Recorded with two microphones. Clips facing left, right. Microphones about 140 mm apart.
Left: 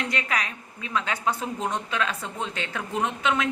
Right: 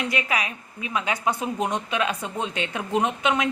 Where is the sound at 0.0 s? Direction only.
10° right (ahead or behind).